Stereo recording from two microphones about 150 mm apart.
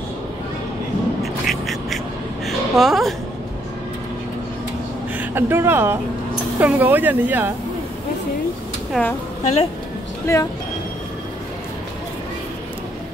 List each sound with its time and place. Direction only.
1.2 s a sound: centre (ahead or behind)
5.3 s speech: 15° right (ahead or behind)
9.0 s a woman's voice: 5° left (ahead or behind)
9.4 s speech: 50° left (ahead or behind)
10.3 s speech: 20° left (ahead or behind)